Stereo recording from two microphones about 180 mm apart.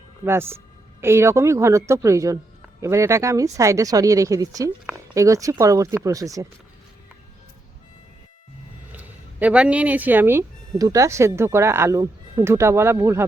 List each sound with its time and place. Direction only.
0.3 s speech: 15° right (ahead or behind)
8.9 s speech: 10° right (ahead or behind)